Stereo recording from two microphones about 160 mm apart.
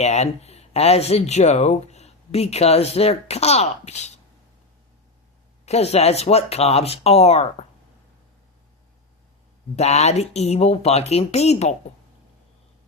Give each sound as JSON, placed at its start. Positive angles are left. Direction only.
{"t": 0.0, "sound": "speech", "side_deg": 45}
{"t": 5.6, "sound": "speech", "side_deg": 40}
{"t": 9.7, "sound": "speech", "side_deg": 45}